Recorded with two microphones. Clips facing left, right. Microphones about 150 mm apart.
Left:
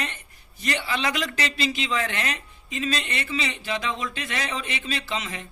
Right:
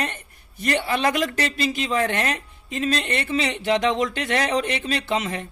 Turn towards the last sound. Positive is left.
turn(degrees=-55)  # may be behind; listen again after turning